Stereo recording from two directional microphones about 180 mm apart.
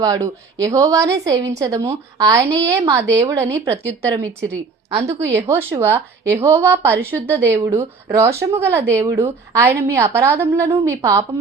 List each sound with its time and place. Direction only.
0.0 s a woman's voice: 20° right (ahead or behind)